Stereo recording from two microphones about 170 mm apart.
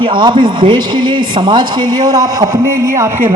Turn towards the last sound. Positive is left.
turn(degrees=-15)  # may be behind; listen again after turning